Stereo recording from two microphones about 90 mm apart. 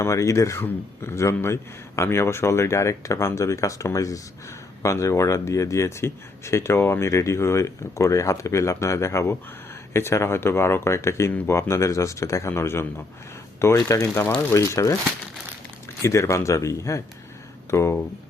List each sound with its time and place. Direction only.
0.0 s speech: 35° left (ahead or behind)
13.7 s speech: 40° left (ahead or behind)
14.1 s speech: 25° left (ahead or behind)
16.0 s speech: 30° left (ahead or behind)